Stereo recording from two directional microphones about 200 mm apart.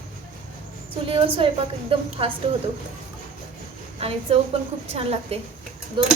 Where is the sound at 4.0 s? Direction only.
30° right (ahead or behind).